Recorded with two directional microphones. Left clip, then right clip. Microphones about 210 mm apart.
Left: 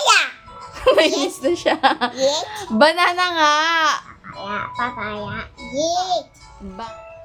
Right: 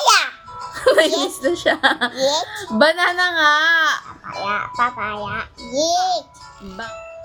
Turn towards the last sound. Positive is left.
turn(degrees=5)  # may be behind; listen again after turning